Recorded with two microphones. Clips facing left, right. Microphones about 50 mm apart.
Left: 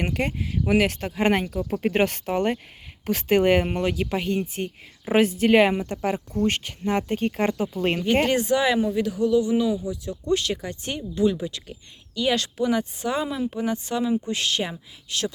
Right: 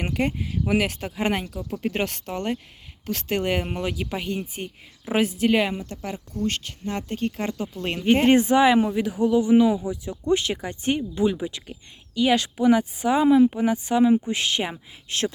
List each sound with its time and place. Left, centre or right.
0.0 s speech: centre
3.8 s speech: centre
5.5 s speech: left; by 8.0 s centre
8.3 s speech: right
15.1 s speech: right